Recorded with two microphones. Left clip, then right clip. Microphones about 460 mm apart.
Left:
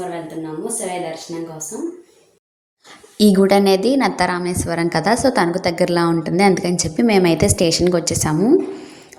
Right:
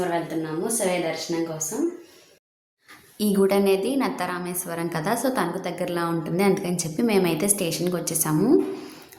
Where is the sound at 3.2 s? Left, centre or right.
Right.